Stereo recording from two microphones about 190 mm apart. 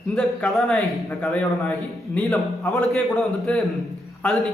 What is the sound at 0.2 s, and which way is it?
A man's voice, 5° left (ahead or behind).